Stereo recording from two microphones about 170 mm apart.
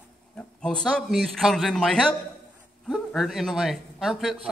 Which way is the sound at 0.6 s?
5° left (ahead or behind).